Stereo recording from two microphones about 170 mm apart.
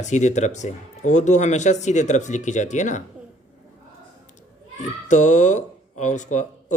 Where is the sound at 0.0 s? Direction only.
45° left (ahead or behind).